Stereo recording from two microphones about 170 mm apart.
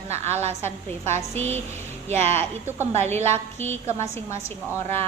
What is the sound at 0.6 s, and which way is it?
Speech, 15° left (ahead or behind).